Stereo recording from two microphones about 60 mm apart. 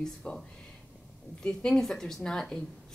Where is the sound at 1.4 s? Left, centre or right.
Centre.